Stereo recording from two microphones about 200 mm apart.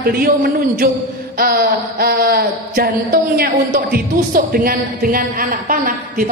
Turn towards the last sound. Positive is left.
turn(degrees=-45)  # may be behind; listen again after turning